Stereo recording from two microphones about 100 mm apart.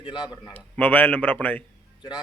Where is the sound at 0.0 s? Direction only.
45° left (ahead or behind).